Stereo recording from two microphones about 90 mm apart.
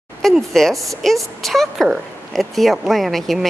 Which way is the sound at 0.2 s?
5° left (ahead or behind).